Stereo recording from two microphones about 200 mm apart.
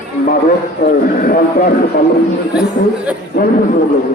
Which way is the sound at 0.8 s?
45° left (ahead or behind).